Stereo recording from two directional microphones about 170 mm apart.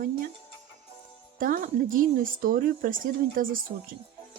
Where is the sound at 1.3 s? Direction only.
55° right (ahead or behind).